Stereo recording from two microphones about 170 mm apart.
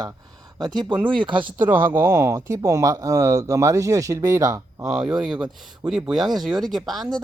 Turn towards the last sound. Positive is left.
turn(degrees=-25)  # may be behind; listen again after turning